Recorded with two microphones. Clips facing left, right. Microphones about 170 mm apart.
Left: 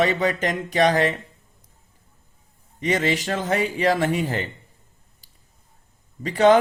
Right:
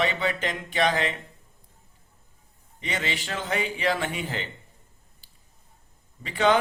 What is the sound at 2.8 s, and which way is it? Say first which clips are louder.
Speech: left 9 dB; 40° left (ahead or behind).